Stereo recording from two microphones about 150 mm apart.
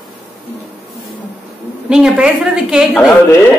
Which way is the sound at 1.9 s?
5° right (ahead or behind).